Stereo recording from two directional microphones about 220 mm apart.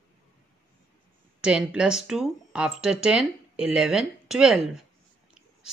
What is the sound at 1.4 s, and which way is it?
Speech, 5° right (ahead or behind).